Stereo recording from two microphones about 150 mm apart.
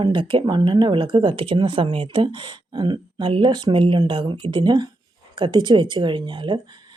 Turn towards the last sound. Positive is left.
turn(degrees=-30)  # may be behind; listen again after turning